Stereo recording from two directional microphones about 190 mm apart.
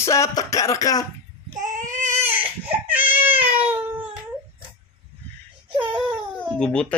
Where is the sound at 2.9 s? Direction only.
10° right (ahead or behind).